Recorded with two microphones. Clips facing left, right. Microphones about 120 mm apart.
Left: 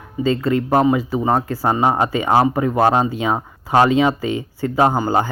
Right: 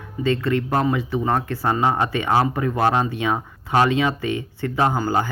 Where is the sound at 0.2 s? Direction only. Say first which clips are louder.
Left 3 dB; 25° left (ahead or behind).